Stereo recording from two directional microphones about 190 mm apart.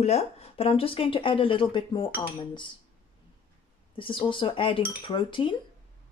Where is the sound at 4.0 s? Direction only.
25° left (ahead or behind).